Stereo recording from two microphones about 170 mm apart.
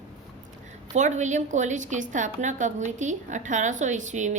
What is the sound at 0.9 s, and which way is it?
Speech, 45° right (ahead or behind).